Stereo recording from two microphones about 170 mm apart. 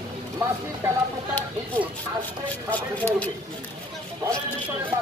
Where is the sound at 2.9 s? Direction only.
10° left (ahead or behind).